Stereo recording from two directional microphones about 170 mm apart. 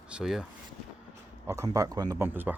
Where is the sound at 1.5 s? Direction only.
20° right (ahead or behind).